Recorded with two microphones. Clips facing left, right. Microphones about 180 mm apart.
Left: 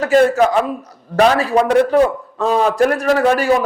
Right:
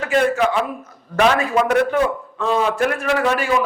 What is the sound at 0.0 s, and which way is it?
A man's voice, 40° left (ahead or behind).